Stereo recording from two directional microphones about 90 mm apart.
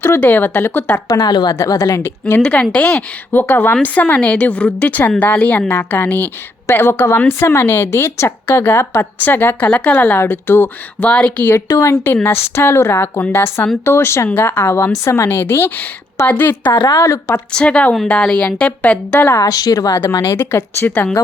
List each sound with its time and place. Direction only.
0.2 s speech: 20° left (ahead or behind)
1.0 s speech: 45° left (ahead or behind)
2.0 s speech: 25° left (ahead or behind)
11.7 s speech: 30° left (ahead or behind)
16.9 s speech: 30° left (ahead or behind)
17.5 s speech: 10° left (ahead or behind)
19.4 s speech: 45° left (ahead or behind); by 21.2 s 20° left (ahead or behind)